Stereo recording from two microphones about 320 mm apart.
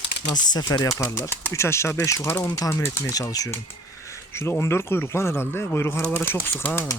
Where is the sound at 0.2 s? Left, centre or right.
Centre.